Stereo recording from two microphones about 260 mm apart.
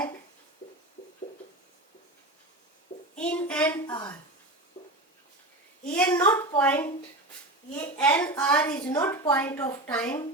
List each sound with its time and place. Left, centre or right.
3.2 s a woman's voice: centre
3.8 s a woman's voice: centre
4.8 s a sound: left
5.8 s a woman's voice: centre